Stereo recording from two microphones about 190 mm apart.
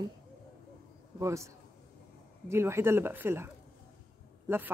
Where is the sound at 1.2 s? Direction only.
15° right (ahead or behind).